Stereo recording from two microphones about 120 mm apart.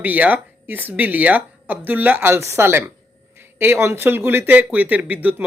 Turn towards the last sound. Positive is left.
turn(degrees=-15)  # may be behind; listen again after turning